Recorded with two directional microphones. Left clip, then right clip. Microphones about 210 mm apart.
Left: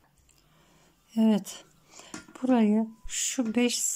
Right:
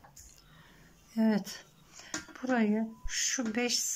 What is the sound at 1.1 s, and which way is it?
Speech, 15° left (ahead or behind).